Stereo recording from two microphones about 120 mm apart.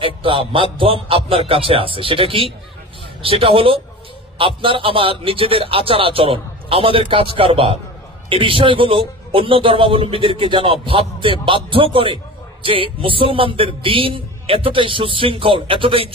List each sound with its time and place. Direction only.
0.0 s a man's voice: 45° right (ahead or behind)